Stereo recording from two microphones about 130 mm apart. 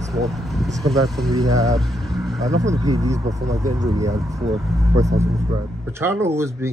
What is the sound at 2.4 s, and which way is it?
A man's voice, 25° right (ahead or behind).